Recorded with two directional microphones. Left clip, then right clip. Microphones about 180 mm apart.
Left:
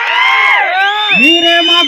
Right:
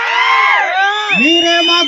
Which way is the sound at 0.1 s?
55° left (ahead or behind).